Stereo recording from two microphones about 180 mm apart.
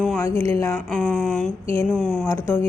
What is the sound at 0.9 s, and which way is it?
A woman's voice, 5° left (ahead or behind).